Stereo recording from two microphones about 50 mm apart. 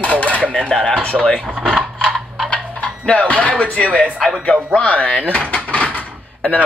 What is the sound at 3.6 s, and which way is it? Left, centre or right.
Speech, left.